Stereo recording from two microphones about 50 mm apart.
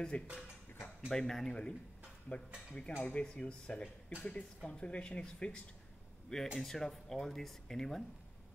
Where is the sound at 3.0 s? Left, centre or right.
Left.